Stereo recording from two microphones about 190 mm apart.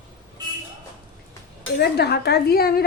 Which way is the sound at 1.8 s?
60° left (ahead or behind).